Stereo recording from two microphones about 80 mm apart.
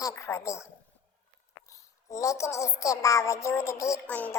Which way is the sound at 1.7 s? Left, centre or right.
Left.